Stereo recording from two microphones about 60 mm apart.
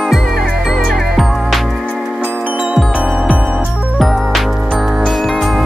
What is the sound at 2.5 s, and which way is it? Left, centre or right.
Music, right.